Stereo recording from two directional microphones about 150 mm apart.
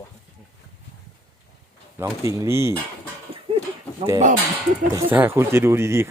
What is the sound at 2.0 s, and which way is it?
Speech, 20° right (ahead or behind).